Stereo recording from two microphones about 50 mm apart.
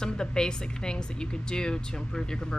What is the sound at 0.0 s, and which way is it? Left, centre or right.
Speech, centre.